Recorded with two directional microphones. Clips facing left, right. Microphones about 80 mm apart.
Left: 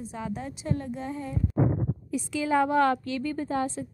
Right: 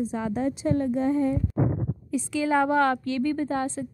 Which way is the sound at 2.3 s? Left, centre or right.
Centre.